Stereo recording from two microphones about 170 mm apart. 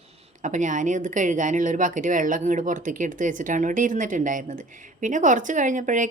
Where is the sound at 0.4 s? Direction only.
45° right (ahead or behind).